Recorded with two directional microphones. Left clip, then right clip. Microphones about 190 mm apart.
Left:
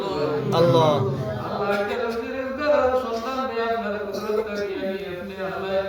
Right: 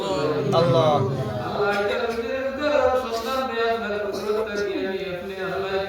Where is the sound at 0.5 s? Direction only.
60° left (ahead or behind).